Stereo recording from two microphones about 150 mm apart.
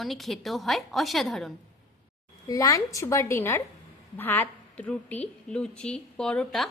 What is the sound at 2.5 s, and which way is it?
A woman's voice, 25° left (ahead or behind).